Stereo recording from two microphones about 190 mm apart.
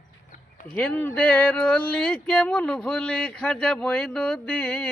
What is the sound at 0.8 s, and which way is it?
Speech, 10° left (ahead or behind).